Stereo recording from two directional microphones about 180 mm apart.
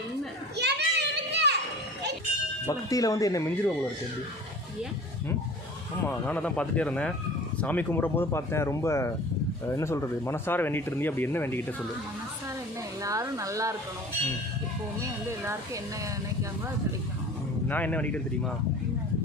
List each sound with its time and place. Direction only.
0.5 s children playing: 70° right (ahead or behind)
2.6 s speech: 20° left (ahead or behind)
6.1 s speech: 10° left (ahead or behind)
13.0 s speech: 20° right (ahead or behind)
15.0 s speech: 15° right (ahead or behind)
17.7 s speech: 10° left (ahead or behind)